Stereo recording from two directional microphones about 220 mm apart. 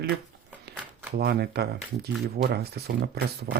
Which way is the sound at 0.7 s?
45° right (ahead or behind).